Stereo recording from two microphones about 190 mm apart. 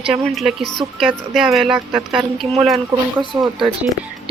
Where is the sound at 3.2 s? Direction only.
25° right (ahead or behind).